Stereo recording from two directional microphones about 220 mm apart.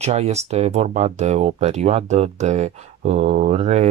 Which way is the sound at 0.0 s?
30° right (ahead or behind).